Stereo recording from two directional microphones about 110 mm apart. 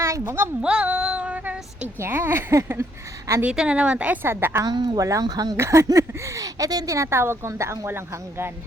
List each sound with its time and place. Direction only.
0.0 s speech: 25° right (ahead or behind)
0.6 s female singing: 10° right (ahead or behind)
2.0 s speech: 20° right (ahead or behind)
3.4 s a woman's voice: 10° right (ahead or behind)
4.6 s speech: 40° right (ahead or behind)
5.5 s speech: 25° right (ahead or behind)